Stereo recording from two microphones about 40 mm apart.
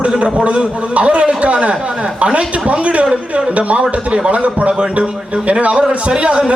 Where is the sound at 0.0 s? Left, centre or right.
Right.